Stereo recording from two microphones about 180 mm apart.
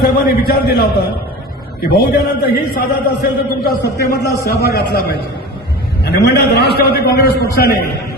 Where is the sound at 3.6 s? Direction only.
55° left (ahead or behind).